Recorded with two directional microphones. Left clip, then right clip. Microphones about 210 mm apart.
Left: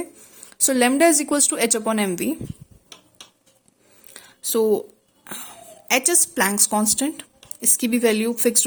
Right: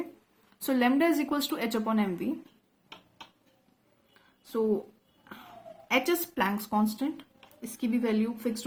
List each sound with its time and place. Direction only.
0.5 s a woman's voice: 40° left (ahead or behind)
5.9 s speech: 45° left (ahead or behind)